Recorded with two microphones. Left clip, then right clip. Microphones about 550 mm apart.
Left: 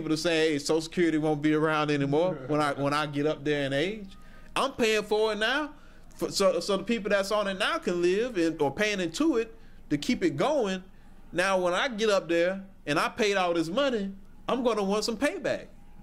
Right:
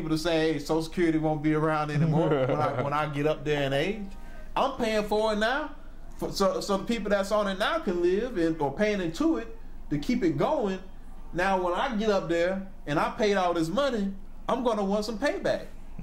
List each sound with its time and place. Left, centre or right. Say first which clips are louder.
0.1 s speech: even; left
4.6 s a man's voice: even; left
12.3 s a man's voice: even; left